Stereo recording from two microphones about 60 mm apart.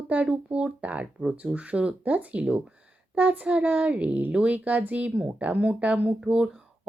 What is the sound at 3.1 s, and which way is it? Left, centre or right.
Speech, right.